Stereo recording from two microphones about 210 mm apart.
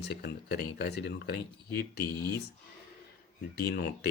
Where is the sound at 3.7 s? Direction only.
50° left (ahead or behind).